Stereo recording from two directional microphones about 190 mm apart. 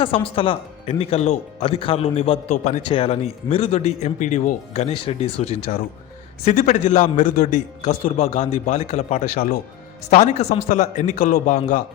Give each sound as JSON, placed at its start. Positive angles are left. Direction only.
{"t": 0.0, "sound": "speech", "side_deg": 30}
{"t": 10.1, "sound": "speech", "side_deg": 35}